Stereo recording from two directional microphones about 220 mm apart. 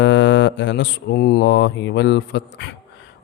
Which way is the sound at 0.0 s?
55° left (ahead or behind).